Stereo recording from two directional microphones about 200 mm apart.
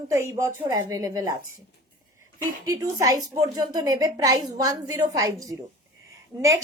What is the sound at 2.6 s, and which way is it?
A woman's voice, 15° right (ahead or behind).